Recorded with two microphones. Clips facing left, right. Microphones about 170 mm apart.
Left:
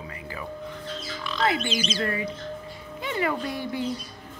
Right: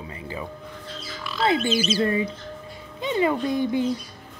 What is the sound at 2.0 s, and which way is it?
Speech, 25° right (ahead or behind).